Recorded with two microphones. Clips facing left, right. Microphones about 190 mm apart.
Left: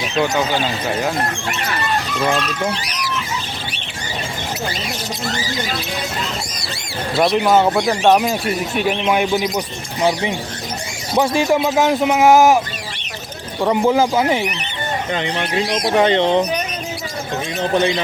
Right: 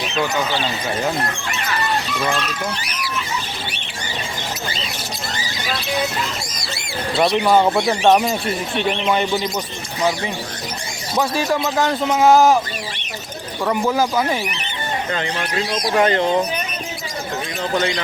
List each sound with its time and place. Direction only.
7.2 s speech: 5° left (ahead or behind)
13.6 s speech: 20° left (ahead or behind)
17.6 s speech: 20° left (ahead or behind)